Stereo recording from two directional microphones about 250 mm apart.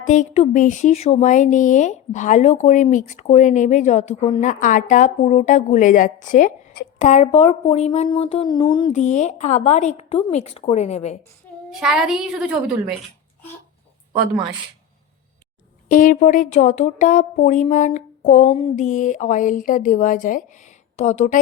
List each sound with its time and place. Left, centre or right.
0.0 s speech: left
9.0 s speech: left
11.7 s a woman's voice: centre
15.9 s speech: left